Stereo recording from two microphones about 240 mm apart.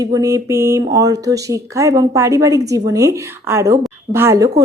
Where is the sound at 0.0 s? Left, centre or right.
Centre.